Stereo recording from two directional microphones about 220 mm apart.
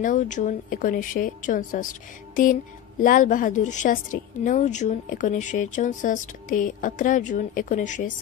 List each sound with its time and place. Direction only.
0.0 s a woman's voice: 35° left (ahead or behind)